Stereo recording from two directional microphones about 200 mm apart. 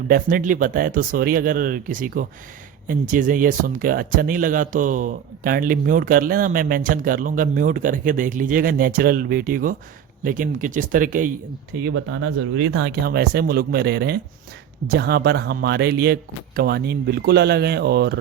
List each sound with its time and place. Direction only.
0.1 s speech: 45° right (ahead or behind)
11.8 s speech: 65° right (ahead or behind)